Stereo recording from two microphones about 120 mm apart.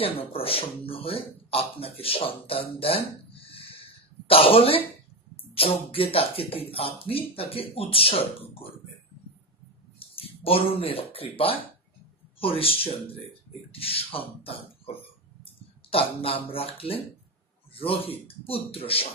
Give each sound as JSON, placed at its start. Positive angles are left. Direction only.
{"t": 0.0, "sound": "speech", "side_deg": 50}
{"t": 9.9, "sound": "speech", "side_deg": 50}